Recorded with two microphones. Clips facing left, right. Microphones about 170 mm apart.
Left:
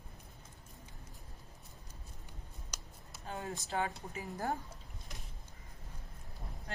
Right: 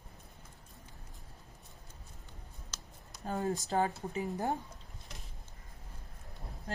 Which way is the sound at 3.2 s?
40° right (ahead or behind).